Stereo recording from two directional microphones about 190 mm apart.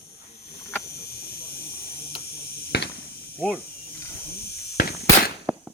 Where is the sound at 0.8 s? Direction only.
55° left (ahead or behind).